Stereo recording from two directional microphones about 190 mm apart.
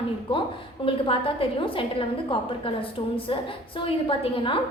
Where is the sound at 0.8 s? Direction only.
25° left (ahead or behind).